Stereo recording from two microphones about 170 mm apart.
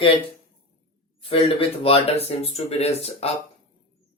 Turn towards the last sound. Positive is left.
turn(degrees=35)  # may be behind; listen again after turning